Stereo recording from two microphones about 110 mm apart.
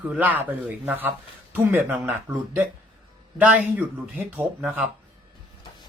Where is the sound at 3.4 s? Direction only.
15° right (ahead or behind).